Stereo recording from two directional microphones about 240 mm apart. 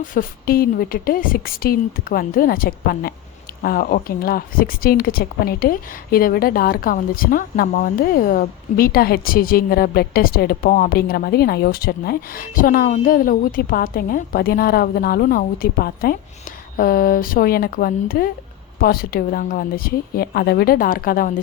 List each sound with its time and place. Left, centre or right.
0.0 s speech: left